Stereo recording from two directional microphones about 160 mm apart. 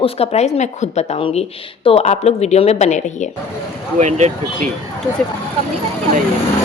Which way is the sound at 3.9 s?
45° right (ahead or behind).